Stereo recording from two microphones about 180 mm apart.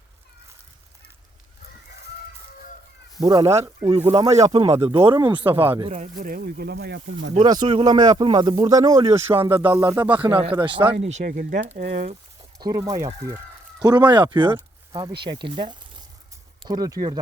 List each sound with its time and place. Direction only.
3.2 s speech: 20° right (ahead or behind)
6.0 s speech: 50° right (ahead or behind); by 7.3 s 70° right (ahead or behind)
7.3 s speech: 25° right (ahead or behind)
9.6 s a sound: 15° right (ahead or behind)
10.2 s speech: 30° right (ahead or behind)
11.0 s speech: 40° right (ahead or behind)
12.5 s speech: 20° right (ahead or behind)